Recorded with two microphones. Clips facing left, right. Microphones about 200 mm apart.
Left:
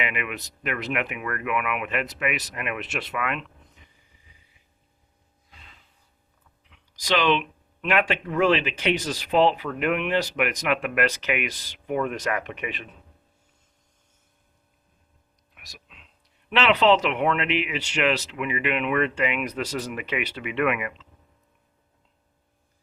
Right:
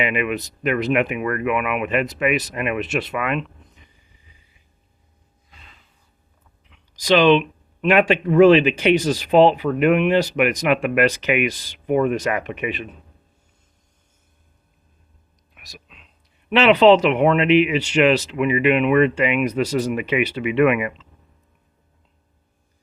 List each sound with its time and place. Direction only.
0.0 s speech: 25° right (ahead or behind)
6.9 s speech: 20° right (ahead or behind)
15.5 s a sound: centre (ahead or behind)
16.5 s speech: 15° right (ahead or behind)